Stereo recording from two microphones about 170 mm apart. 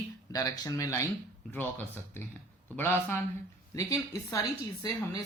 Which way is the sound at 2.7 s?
15° left (ahead or behind).